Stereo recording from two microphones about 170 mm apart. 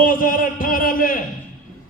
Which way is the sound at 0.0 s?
55° left (ahead or behind).